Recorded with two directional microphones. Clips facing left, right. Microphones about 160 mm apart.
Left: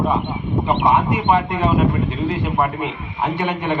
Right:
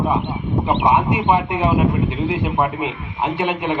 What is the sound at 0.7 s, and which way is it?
A man's voice, 15° right (ahead or behind).